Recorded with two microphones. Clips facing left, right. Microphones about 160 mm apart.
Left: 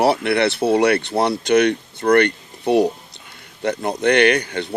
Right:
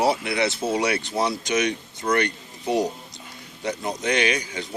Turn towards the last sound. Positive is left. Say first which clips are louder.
# left 8 dB
turn(degrees=65)  # may be behind; listen again after turning